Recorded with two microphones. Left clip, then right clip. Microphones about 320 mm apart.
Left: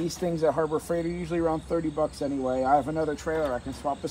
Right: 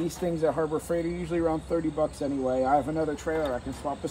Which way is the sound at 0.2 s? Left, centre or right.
Centre.